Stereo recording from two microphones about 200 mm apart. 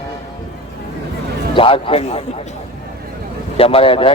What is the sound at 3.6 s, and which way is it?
Speech, 30° left (ahead or behind).